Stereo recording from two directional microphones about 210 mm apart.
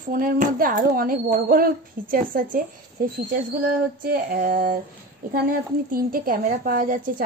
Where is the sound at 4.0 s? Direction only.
40° right (ahead or behind).